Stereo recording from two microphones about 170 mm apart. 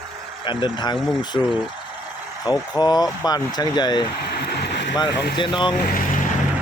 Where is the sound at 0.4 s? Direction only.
30° left (ahead or behind).